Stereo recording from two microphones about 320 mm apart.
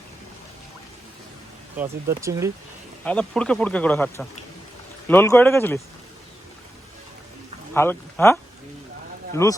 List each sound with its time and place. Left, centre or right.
1.8 s speech: centre
3.0 s speech: centre
7.7 s speech: centre